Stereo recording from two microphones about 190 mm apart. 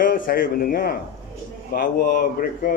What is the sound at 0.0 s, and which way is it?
Speech, 50° left (ahead or behind).